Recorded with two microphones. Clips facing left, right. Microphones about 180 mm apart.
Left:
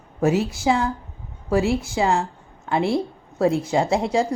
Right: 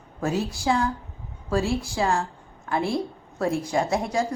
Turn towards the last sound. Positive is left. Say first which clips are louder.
# left 4 dB
turn(degrees=25)  # may be behind; listen again after turning